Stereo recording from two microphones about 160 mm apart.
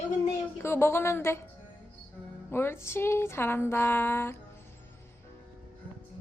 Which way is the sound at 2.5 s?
15° left (ahead or behind).